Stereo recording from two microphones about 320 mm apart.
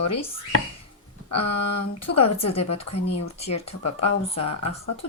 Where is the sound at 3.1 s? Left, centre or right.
Left.